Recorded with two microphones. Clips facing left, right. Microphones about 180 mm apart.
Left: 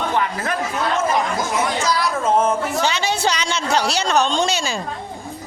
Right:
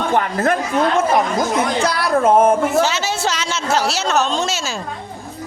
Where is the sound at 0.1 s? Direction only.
50° right (ahead or behind).